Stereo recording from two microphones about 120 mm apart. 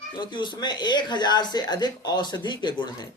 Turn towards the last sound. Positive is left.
turn(degrees=40)  # may be behind; listen again after turning